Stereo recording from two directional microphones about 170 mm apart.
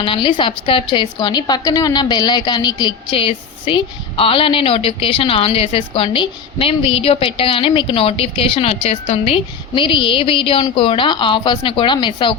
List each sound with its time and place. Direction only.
0.0 s a woman's voice: 30° left (ahead or behind)